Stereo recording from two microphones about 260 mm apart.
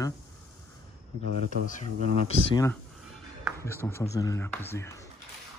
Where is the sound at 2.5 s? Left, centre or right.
Centre.